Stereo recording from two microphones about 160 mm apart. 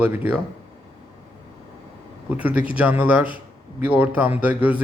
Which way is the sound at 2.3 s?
10° right (ahead or behind).